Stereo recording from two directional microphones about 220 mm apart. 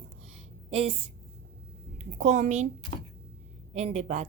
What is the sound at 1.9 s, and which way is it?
Speech, 30° right (ahead or behind).